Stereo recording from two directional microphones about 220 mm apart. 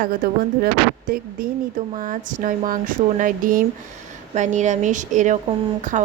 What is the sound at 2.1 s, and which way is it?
A woman's voice, 35° right (ahead or behind).